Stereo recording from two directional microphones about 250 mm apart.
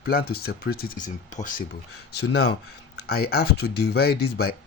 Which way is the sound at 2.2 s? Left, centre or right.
Left.